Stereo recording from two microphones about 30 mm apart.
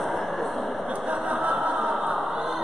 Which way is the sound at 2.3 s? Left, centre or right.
Centre.